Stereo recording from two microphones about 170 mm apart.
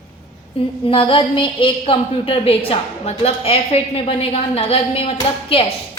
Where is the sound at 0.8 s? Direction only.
30° left (ahead or behind).